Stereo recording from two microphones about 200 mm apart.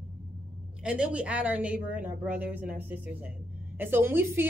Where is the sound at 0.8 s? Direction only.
5° right (ahead or behind).